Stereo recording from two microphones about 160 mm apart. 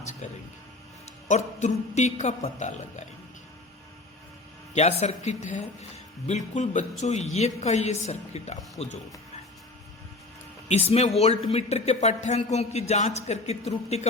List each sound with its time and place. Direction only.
0.0 s speech: 45° left (ahead or behind)
1.3 s speech: 50° left (ahead or behind)
4.7 s speech: 40° left (ahead or behind)
10.7 s speech: 45° left (ahead or behind)